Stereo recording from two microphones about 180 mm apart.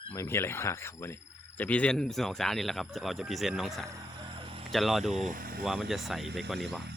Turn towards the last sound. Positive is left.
turn(degrees=0)  # may be behind; listen again after turning